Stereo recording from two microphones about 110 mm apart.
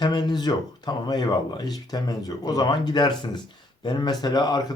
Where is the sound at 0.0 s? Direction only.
40° left (ahead or behind).